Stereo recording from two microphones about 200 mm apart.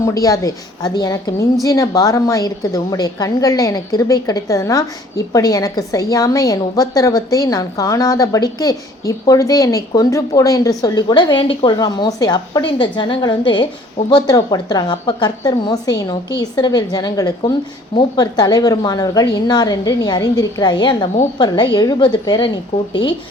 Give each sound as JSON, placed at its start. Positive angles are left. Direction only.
{"t": 0.0, "sound": "a woman's voice", "side_deg": 15}